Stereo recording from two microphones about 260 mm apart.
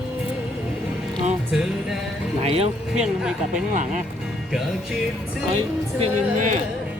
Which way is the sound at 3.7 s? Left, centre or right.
Right.